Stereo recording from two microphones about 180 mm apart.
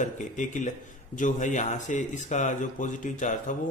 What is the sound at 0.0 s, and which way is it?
Speech, 45° left (ahead or behind).